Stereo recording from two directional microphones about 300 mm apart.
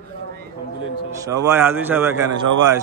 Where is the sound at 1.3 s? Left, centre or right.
Centre.